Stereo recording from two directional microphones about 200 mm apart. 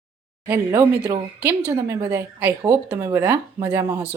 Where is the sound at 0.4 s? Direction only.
10° right (ahead or behind).